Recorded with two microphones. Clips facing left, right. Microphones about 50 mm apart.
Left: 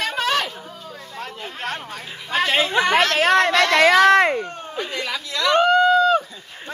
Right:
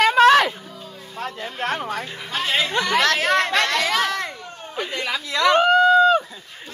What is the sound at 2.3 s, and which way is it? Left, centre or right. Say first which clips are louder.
Speech: left 3 dB; left.